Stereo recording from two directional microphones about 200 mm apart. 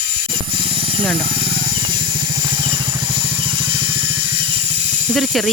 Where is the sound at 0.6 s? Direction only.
25° right (ahead or behind).